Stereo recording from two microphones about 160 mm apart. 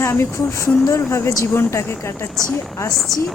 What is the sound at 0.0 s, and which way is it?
Speech, 15° left (ahead or behind).